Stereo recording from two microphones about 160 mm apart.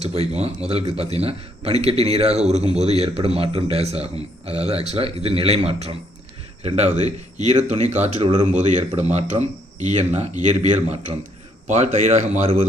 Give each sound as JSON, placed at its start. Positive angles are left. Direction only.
{"t": 0.0, "sound": "speech", "side_deg": -40}